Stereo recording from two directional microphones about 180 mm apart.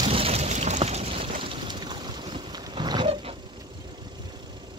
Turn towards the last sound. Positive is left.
turn(degrees=-30)  # may be behind; listen again after turning